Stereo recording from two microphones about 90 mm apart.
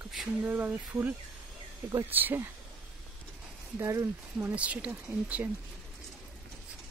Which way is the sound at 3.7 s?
35° right (ahead or behind).